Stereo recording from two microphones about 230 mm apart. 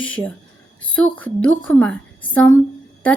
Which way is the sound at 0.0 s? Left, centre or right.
Centre.